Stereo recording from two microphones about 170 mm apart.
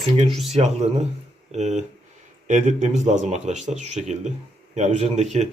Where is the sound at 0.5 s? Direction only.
40° right (ahead or behind).